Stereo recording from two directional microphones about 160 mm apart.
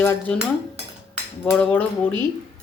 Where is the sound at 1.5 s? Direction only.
10° left (ahead or behind).